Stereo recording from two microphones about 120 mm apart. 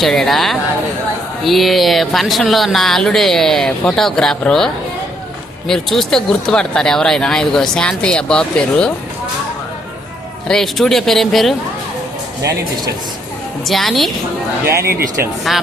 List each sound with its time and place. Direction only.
0.0 s speech: centre (ahead or behind)
10.5 s speech: 5° left (ahead or behind)
12.4 s speech: 30° right (ahead or behind)
13.7 s speech: centre (ahead or behind)
14.7 s speech: 20° right (ahead or behind)